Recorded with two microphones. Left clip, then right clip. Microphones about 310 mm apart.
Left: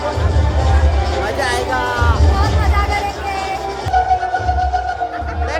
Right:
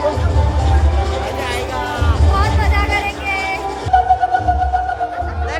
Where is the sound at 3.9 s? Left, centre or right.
Right.